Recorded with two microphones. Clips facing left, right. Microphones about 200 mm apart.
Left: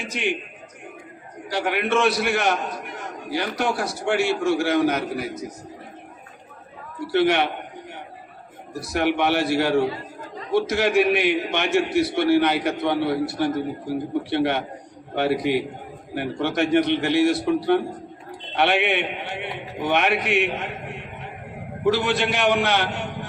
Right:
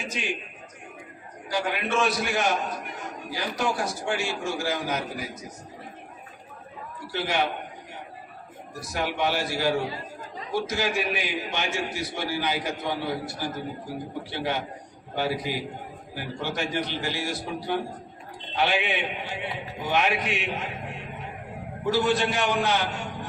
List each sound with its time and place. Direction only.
0.1 s a man's voice: 65° left (ahead or behind)
1.5 s a man's voice: 65° left (ahead or behind)
7.1 s a man's voice: 65° left (ahead or behind)
8.9 s a man's voice: 65° left (ahead or behind)
21.8 s a man's voice: 70° left (ahead or behind)